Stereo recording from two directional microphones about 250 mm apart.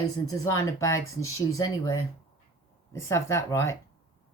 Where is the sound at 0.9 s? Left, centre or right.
Left.